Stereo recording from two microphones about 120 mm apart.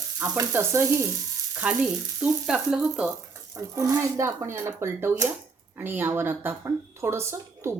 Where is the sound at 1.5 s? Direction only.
10° right (ahead or behind).